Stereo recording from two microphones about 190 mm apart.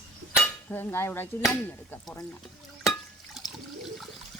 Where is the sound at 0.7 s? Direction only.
10° left (ahead or behind).